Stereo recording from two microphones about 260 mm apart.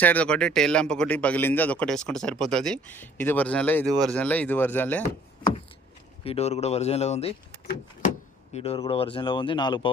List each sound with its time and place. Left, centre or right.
0.0 s speech: centre
6.2 s speech: left
8.5 s speech: left